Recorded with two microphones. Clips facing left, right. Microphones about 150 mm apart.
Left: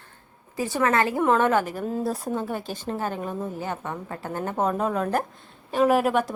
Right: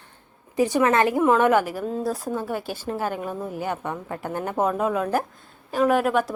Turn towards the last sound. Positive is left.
turn(degrees=0)  # may be behind; listen again after turning